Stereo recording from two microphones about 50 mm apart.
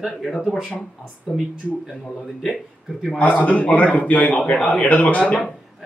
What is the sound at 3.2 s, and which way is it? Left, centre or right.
A man's voice, left.